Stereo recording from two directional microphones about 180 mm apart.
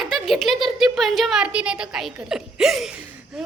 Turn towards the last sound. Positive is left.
turn(degrees=-5)  # may be behind; listen again after turning